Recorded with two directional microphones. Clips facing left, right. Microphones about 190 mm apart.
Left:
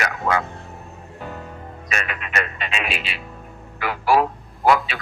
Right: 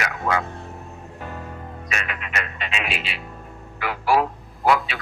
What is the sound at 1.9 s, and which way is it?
Speech, 45° left (ahead or behind).